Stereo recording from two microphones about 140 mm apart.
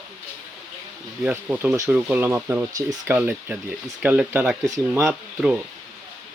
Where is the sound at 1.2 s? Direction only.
10° right (ahead or behind).